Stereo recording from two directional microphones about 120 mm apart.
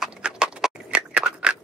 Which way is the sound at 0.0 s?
5° right (ahead or behind).